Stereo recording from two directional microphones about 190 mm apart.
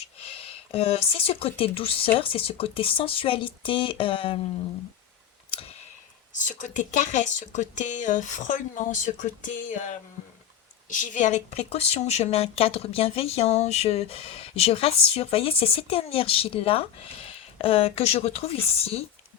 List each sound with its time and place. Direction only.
0.0 s speech: 30° left (ahead or behind)
5.5 s clicking: 30° left (ahead or behind)
6.3 s a woman's voice: 40° left (ahead or behind)